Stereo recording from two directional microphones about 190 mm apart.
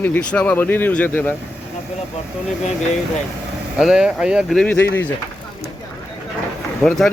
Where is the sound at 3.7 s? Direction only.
5° right (ahead or behind).